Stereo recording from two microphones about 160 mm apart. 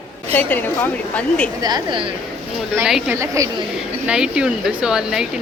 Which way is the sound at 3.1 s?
20° right (ahead or behind).